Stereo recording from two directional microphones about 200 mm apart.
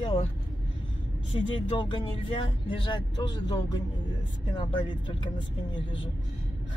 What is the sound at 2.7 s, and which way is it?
Speech, 20° left (ahead or behind).